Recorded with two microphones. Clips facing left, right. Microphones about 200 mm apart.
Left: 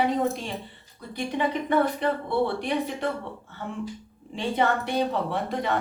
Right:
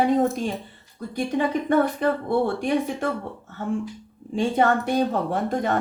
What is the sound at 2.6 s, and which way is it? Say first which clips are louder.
Speech: right 4 dB; 45° right (ahead or behind).